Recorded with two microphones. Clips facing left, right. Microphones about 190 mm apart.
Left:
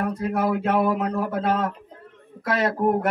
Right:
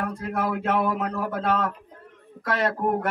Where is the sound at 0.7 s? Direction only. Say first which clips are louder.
Left 2 dB; 15° left (ahead or behind).